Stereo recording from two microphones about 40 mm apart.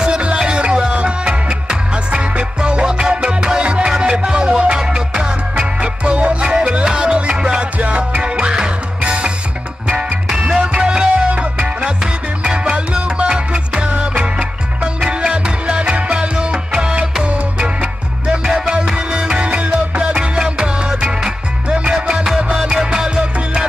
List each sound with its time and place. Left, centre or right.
0.0 s music: right
7.8 s music: right
8.2 s music: right